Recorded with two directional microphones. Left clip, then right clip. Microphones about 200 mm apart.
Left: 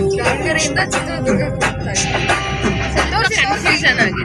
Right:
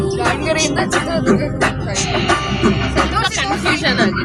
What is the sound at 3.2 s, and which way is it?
Music, 30° right (ahead or behind).